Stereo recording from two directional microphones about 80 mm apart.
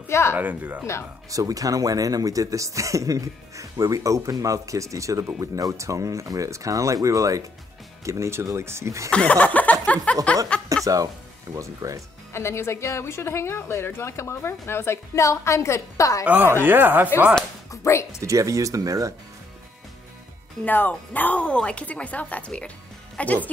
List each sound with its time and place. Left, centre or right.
0.1 s a woman's voice: left
0.4 s speech: right
1.3 s speech: right
9.1 s chuckle: centre
10.3 s speech: centre
10.7 s speech: right
12.3 s a woman's voice: left
16.3 s speech: right
17.6 s speech: left
18.2 s speech: right
20.6 s speech: left